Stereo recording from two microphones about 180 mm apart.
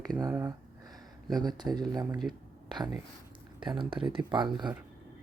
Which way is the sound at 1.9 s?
20° right (ahead or behind).